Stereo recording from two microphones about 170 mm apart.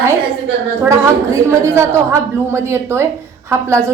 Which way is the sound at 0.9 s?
15° right (ahead or behind).